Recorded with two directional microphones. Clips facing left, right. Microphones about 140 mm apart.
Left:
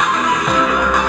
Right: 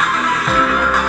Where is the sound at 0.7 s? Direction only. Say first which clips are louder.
Left 1 dB; 10° left (ahead or behind).